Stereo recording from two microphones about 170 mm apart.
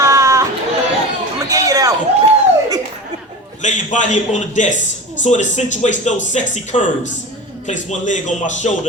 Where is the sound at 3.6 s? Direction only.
45° left (ahead or behind).